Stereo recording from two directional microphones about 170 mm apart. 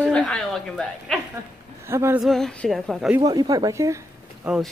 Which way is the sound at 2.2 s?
Centre (ahead or behind).